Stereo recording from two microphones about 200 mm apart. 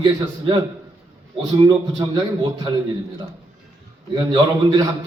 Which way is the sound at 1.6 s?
25° right (ahead or behind).